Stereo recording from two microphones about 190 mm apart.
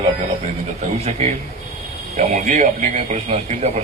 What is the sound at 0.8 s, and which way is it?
A man's voice, 35° right (ahead or behind).